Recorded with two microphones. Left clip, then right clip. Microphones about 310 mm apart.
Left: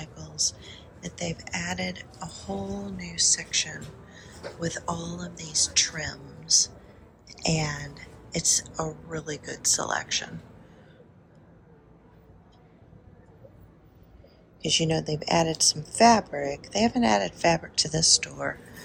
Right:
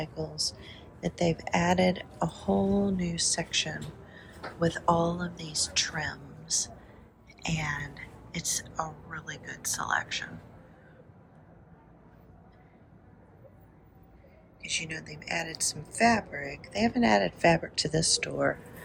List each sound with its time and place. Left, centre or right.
0.0 s a woman's voice: centre
14.6 s a woman's voice: left
16.0 s a woman's voice: centre